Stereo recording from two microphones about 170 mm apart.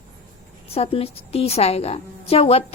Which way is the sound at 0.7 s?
35° left (ahead or behind).